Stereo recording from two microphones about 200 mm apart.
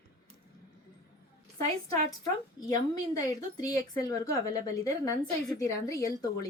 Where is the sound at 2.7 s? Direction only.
20° left (ahead or behind).